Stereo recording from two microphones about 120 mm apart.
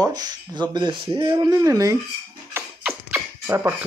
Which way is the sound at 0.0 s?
35° right (ahead or behind).